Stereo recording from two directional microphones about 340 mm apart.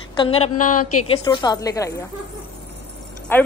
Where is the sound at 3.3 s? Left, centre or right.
Centre.